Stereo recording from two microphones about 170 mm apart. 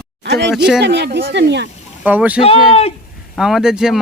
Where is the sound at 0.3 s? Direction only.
85° right.